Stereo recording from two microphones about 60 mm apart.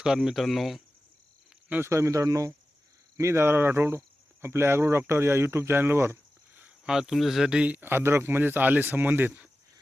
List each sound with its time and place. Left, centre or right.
0.0 s speech: centre
1.8 s speech: right
3.2 s speech: right
6.8 s speech: centre
7.8 s speech: right